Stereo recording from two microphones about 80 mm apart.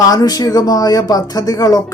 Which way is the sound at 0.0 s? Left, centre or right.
Left.